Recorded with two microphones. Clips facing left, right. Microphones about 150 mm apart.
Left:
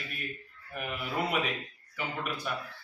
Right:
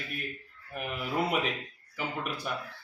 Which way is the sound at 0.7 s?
5° right (ahead or behind).